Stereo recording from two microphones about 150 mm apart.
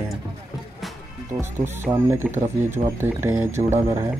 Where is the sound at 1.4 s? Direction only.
15° right (ahead or behind).